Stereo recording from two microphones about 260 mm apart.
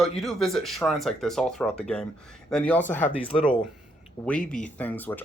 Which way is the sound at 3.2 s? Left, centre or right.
Left.